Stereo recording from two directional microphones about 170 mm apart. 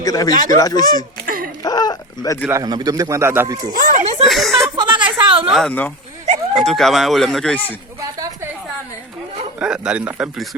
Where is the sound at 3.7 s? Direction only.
50° right (ahead or behind).